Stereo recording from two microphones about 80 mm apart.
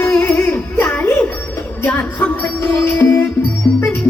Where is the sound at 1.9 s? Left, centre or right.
Centre.